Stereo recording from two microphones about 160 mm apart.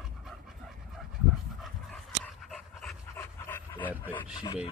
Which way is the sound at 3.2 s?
15° left (ahead or behind).